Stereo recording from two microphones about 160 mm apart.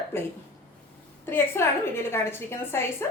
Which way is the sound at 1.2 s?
15° left (ahead or behind).